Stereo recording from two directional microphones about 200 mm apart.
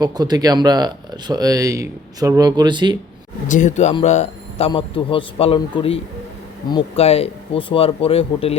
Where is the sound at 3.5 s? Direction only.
40° left (ahead or behind).